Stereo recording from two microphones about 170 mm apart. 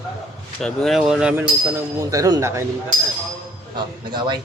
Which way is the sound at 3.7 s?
25° right (ahead or behind).